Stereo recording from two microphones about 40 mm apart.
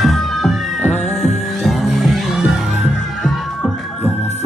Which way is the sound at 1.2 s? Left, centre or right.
Centre.